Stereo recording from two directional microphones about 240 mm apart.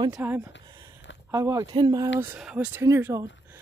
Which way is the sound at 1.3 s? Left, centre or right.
Centre.